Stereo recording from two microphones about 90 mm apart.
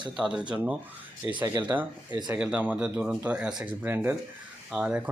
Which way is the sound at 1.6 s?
20° right (ahead or behind).